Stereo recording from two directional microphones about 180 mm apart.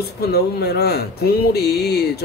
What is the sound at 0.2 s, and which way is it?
A man's voice, 60° left (ahead or behind).